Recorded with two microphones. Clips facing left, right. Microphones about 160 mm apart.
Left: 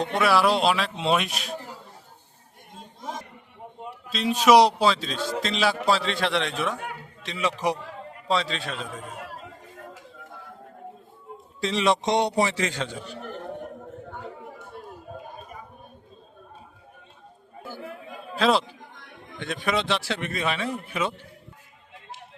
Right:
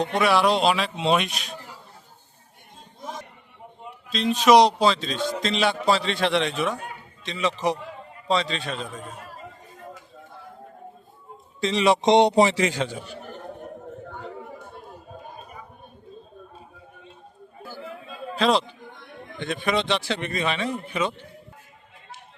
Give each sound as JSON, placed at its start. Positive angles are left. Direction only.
{"t": 0.0, "sound": "a man's voice", "side_deg": 0}
{"t": 4.1, "sound": "a man's voice", "side_deg": 5}
{"t": 9.2, "sound": "chatter", "side_deg": 70}
{"t": 11.6, "sound": "a man's voice", "side_deg": 0}
{"t": 12.0, "sound": "a man's voice", "side_deg": -20}
{"t": 18.3, "sound": "a man's voice", "side_deg": 0}